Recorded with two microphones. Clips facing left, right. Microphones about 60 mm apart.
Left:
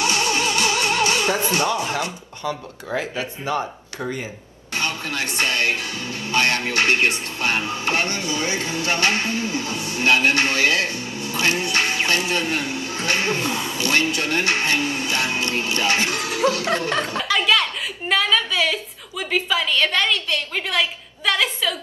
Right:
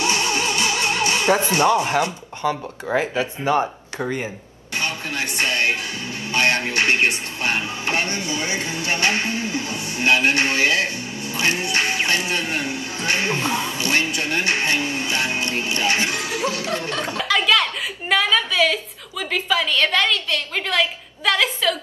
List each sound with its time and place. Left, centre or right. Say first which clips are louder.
0.0 s music: even; right
3.0 s speech: right 5 dB; right
4.7 s speech: even; right
17.3 s a woman's voice: right 2 dB; centre